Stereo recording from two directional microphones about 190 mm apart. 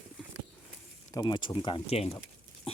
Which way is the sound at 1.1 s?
20° left (ahead or behind).